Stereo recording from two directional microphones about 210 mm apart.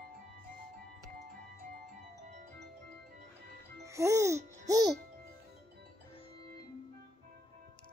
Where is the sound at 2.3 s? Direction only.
40° right (ahead or behind).